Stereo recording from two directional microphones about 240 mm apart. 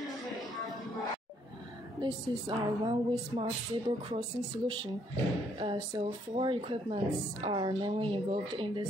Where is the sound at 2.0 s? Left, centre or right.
Centre.